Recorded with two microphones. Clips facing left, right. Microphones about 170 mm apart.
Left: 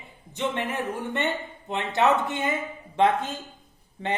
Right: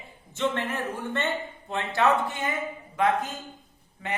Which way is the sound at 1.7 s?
20° left (ahead or behind).